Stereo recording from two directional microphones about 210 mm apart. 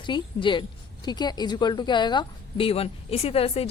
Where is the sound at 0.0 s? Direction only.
25° left (ahead or behind).